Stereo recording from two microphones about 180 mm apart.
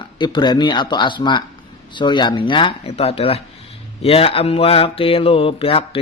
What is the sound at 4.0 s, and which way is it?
Mantra, 35° left (ahead or behind).